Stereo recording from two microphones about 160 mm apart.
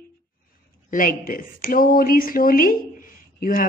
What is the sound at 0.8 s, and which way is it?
A woman's voice, 60° left (ahead or behind).